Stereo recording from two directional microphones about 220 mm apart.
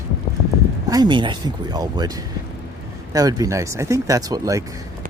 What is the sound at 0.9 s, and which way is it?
Speech, 20° right (ahead or behind).